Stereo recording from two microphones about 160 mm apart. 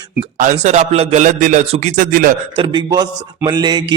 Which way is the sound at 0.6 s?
45° right (ahead or behind).